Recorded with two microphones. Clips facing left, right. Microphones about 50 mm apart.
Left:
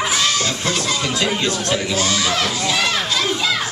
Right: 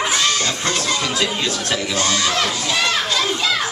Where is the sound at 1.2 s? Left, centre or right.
Left.